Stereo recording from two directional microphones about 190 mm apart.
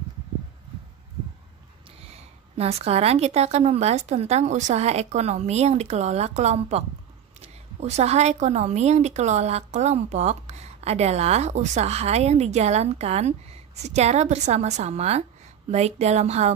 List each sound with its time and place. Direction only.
1.9 s a woman's voice: 30° right (ahead or behind)